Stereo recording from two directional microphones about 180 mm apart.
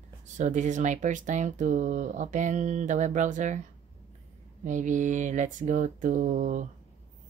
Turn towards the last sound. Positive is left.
turn(degrees=-45)  # may be behind; listen again after turning